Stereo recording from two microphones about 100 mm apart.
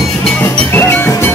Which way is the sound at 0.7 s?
20° left (ahead or behind).